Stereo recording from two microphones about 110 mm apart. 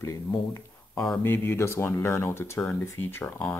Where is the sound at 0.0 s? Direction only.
25° left (ahead or behind).